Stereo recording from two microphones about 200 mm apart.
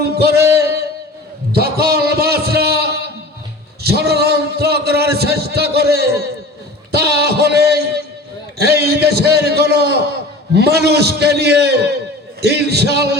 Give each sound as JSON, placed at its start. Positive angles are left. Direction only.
{"t": 0.0, "sound": "music", "side_deg": -50}
{"t": 1.5, "sound": "a sound", "side_deg": -50}
{"t": 3.8, "sound": "a man's voice", "side_deg": -55}